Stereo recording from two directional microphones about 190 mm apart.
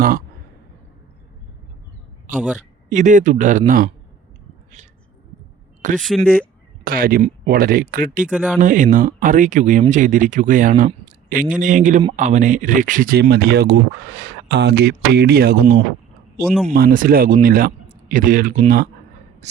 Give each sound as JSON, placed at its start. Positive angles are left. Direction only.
{"t": 2.3, "sound": "speech", "side_deg": -45}
{"t": 5.8, "sound": "speech", "side_deg": -40}
{"t": 6.8, "sound": "speech", "side_deg": -50}
{"t": 16.4, "sound": "speech", "side_deg": 0}
{"t": 16.7, "sound": "speech", "side_deg": -50}